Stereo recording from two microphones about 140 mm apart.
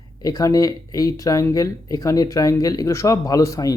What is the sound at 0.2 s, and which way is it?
Speech, 25° left (ahead or behind).